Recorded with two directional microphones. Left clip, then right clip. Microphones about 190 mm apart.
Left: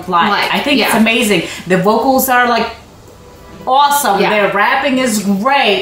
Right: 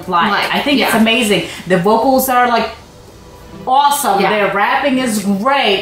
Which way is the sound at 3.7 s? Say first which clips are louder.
Left 1 dB; 15° left (ahead or behind).